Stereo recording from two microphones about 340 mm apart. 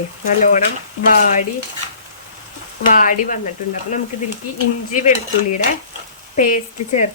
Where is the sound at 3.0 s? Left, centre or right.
Left.